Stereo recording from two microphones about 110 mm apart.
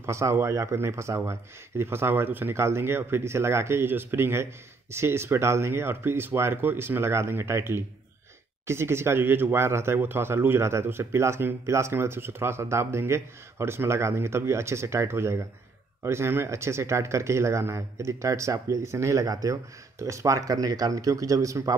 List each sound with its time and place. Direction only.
0.0 s speech: 25° right (ahead or behind)